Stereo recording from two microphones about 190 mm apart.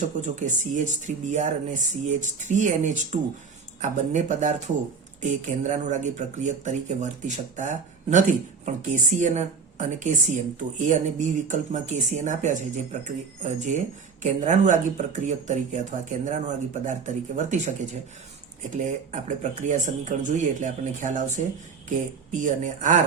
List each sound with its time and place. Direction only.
0.2 s speech: 40° right (ahead or behind)